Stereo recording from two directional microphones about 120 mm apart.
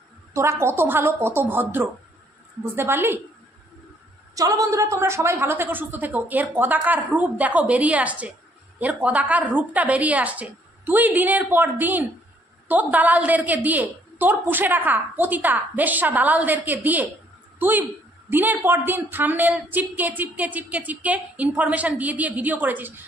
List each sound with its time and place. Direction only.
0.3 s a woman's voice: 25° right (ahead or behind)
4.4 s a woman's voice: 25° right (ahead or behind)